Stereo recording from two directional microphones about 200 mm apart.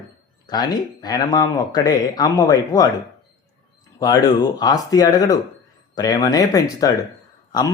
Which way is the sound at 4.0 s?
20° left (ahead or behind).